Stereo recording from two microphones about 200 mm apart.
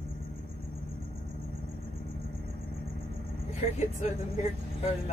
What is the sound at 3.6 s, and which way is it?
Speech, 35° left (ahead or behind).